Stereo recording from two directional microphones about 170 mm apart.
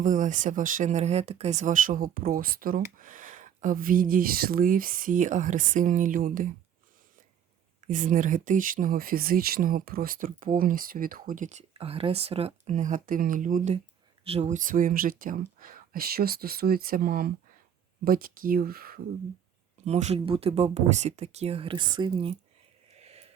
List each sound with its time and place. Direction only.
0.0 s speech: 50° right (ahead or behind)
7.9 s speech: 50° right (ahead or behind)
19.8 s speech: 40° right (ahead or behind)
22.9 s a sound: 40° right (ahead or behind)